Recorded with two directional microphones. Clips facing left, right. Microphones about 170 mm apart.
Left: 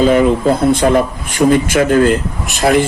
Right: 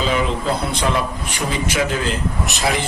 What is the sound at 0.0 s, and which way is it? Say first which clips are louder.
Speech: left 10 dB; 50° left (ahead or behind).